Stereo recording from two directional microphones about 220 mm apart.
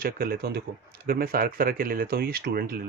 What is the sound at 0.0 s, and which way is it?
Speech, 45° right (ahead or behind).